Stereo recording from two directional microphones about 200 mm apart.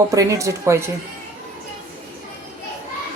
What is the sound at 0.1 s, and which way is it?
Speech, 15° right (ahead or behind).